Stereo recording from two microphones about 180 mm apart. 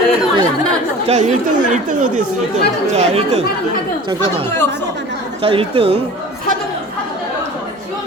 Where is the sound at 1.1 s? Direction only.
40° right (ahead or behind).